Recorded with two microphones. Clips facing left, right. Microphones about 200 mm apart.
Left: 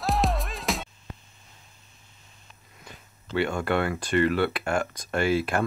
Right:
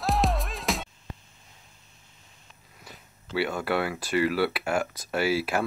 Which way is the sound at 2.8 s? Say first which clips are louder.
Left 1 dB; 5° right (ahead or behind).